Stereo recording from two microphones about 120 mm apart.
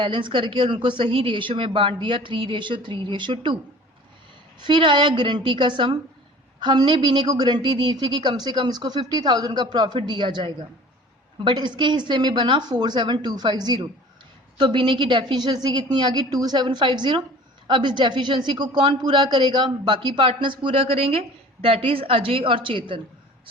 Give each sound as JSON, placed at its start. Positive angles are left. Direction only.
{"t": 0.0, "sound": "a woman's voice", "side_deg": -45}
{"t": 4.6, "sound": "a woman's voice", "side_deg": -40}